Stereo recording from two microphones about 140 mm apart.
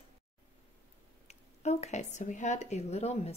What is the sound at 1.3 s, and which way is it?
A woman's voice, 55° left (ahead or behind).